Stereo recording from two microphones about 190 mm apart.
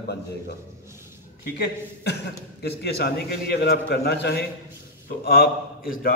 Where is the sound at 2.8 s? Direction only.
55° left (ahead or behind).